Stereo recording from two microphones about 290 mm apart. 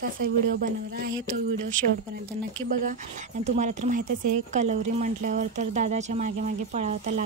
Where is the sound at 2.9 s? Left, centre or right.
Right.